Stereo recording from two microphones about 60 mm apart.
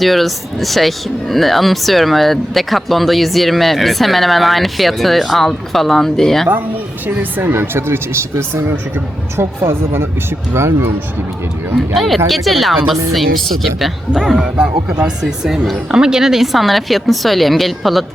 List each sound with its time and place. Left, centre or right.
0.0 s speech: centre
7.2 s speech: right
7.5 s speech: right
11.9 s speech: centre
14.1 s speech: centre
14.4 s speech: centre